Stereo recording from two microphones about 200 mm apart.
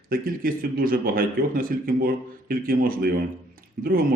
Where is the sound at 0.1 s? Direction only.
45° right (ahead or behind).